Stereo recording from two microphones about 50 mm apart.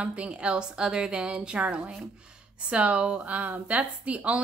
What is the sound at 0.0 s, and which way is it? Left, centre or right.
Speech, right.